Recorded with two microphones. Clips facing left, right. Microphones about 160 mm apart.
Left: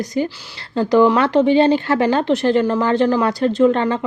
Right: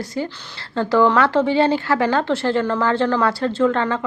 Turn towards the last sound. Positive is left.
turn(degrees=20)  # may be behind; listen again after turning